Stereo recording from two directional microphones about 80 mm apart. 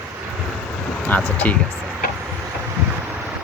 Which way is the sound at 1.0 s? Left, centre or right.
Centre.